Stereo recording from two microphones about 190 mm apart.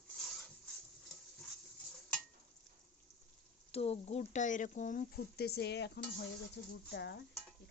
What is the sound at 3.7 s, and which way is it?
Speech, 30° left (ahead or behind).